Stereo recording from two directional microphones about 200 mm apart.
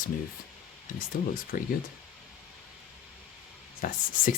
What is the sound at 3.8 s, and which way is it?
Speech, 45° left (ahead or behind).